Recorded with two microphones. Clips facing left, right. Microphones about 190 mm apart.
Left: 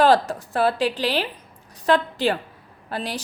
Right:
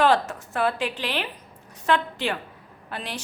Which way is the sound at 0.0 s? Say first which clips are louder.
Left 3 dB; 35° left (ahead or behind).